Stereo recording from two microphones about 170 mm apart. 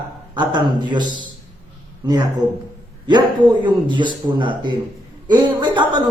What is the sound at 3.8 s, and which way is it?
A man's voice, 25° right (ahead or behind).